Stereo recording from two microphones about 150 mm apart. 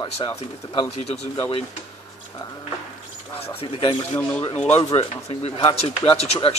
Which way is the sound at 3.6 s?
35° left (ahead or behind).